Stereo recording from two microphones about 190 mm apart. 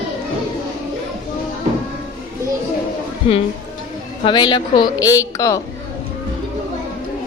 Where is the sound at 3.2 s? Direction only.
25° left (ahead or behind).